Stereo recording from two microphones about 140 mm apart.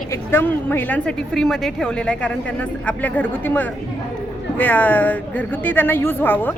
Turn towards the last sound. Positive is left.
turn(degrees=15)  # may be behind; listen again after turning